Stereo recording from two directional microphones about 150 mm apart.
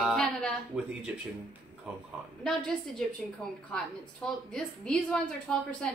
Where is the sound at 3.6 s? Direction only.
5° left (ahead or behind).